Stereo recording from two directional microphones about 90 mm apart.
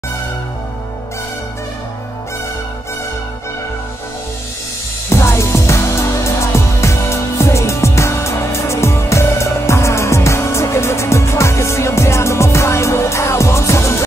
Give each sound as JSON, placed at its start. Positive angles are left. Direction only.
{"t": 5.1, "sound": "music", "side_deg": 30}